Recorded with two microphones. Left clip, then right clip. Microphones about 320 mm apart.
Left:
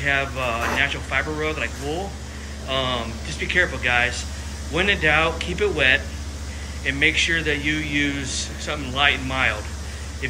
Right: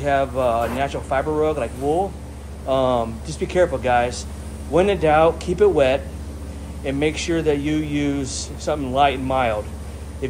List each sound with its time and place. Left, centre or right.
0.0 s speech: centre